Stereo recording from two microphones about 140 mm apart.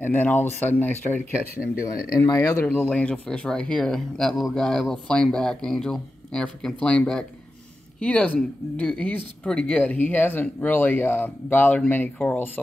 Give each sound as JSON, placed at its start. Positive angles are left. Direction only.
{"t": 0.0, "sound": "speech", "side_deg": 10}
{"t": 2.2, "sound": "speech", "side_deg": 20}
{"t": 2.6, "sound": "speech", "side_deg": 10}